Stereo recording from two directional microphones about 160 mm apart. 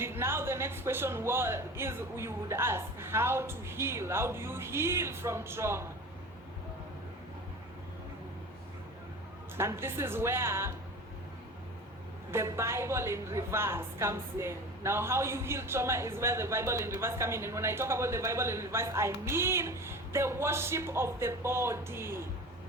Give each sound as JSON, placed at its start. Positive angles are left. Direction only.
{"t": 0.0, "sound": "a woman's voice", "side_deg": -15}
{"t": 9.6, "sound": "a woman's voice", "side_deg": -15}
{"t": 12.3, "sound": "a woman's voice", "side_deg": -15}